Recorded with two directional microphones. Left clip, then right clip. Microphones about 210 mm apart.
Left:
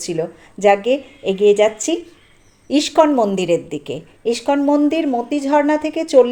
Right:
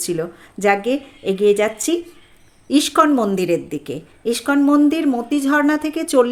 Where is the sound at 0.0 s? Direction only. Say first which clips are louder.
Left 1 dB; 15° right (ahead or behind).